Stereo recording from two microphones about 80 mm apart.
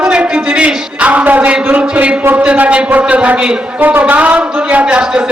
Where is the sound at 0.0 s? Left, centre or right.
Centre.